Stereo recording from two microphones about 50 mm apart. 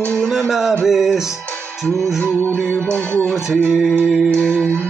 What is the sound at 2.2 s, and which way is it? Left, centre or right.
Music, left.